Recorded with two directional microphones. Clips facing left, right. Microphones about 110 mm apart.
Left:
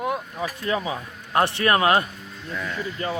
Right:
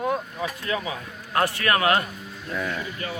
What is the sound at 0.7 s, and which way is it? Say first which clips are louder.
A man's voice: left 2 dB; 30° left (ahead or behind).